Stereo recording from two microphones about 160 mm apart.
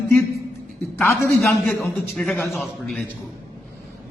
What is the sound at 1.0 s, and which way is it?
Speech, 15° left (ahead or behind).